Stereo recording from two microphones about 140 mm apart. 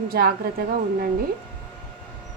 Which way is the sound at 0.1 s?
90° right.